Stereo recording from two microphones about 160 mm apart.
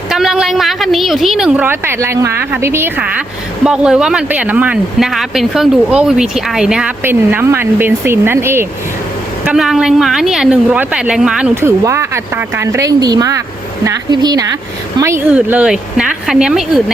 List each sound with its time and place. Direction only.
0.1 s a woman's voice: 5° right (ahead or behind)